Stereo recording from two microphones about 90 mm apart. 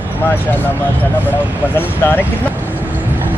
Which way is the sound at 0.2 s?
20° left (ahead or behind).